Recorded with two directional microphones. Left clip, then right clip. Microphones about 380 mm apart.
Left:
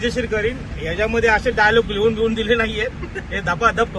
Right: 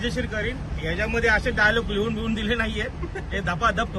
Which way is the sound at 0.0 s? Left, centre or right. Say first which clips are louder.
Left 7 dB; centre.